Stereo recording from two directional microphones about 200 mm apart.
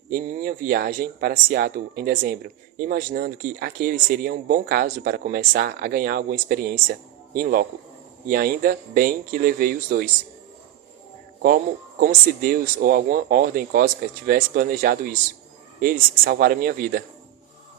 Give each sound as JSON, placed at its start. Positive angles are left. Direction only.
{"t": 0.1, "sound": "speech", "side_deg": -45}
{"t": 11.9, "sound": "speech", "side_deg": -45}